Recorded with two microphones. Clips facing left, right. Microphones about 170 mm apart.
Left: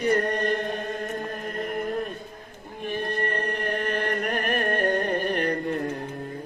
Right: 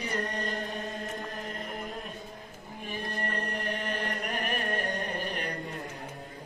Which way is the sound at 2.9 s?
60° left (ahead or behind).